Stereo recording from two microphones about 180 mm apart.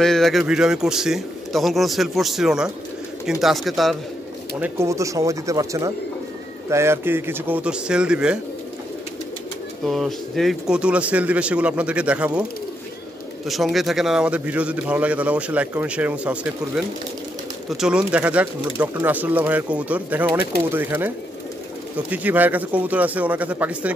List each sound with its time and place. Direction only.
0.0 s a man's voice: centre (ahead or behind)
4.6 s a man's voice: 10° right (ahead or behind)
9.8 s a man's voice: centre (ahead or behind)
13.5 s a man's voice: centre (ahead or behind)